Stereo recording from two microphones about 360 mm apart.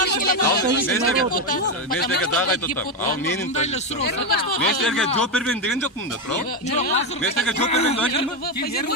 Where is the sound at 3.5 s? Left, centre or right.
Centre.